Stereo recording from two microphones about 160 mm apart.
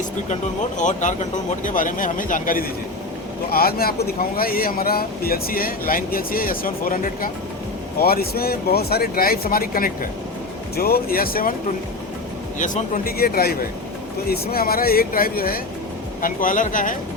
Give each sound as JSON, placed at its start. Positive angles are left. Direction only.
{"t": 0.8, "sound": "speech", "side_deg": 50}
{"t": 3.5, "sound": "speech", "side_deg": 70}
{"t": 7.9, "sound": "speech", "side_deg": 70}
{"t": 12.5, "sound": "speech", "side_deg": 50}